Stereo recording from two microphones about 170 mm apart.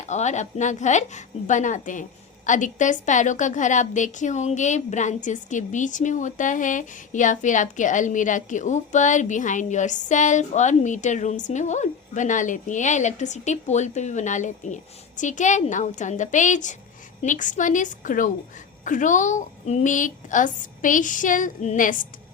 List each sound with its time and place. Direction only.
0.1 s a woman's voice: 45° left (ahead or behind)